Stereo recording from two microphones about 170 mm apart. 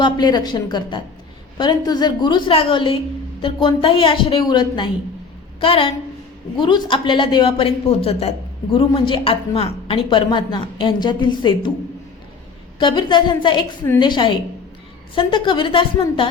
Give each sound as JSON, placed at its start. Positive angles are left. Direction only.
{"t": 0.0, "sound": "a woman's voice", "side_deg": 25}
{"t": 12.8, "sound": "a woman's voice", "side_deg": 30}